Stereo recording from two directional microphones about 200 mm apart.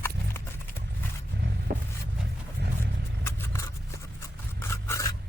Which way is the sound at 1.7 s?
50° right (ahead or behind).